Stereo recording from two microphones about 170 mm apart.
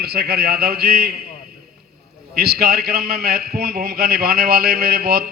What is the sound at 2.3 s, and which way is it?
A man's voice, 65° right (ahead or behind).